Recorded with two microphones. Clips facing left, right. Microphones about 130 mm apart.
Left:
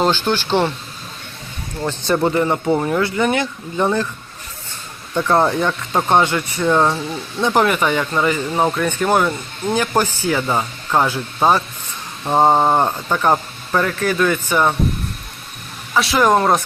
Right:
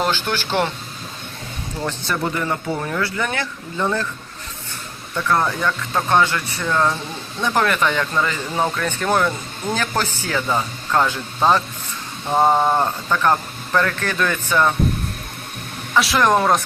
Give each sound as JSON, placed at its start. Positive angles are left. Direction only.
{"t": 0.0, "sound": "speech", "side_deg": 20}
{"t": 2.0, "sound": "speech", "side_deg": 30}
{"t": 5.1, "sound": "speech", "side_deg": 30}
{"t": 12.3, "sound": "speech", "side_deg": 25}
{"t": 16.0, "sound": "speech", "side_deg": 0}